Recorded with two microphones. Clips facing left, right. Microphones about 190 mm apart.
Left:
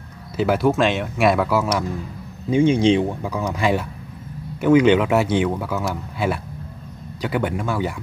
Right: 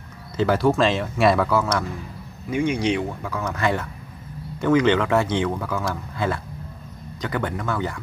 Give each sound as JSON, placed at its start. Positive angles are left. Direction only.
{"t": 0.4, "sound": "speech", "side_deg": 5}
{"t": 2.5, "sound": "speech", "side_deg": 25}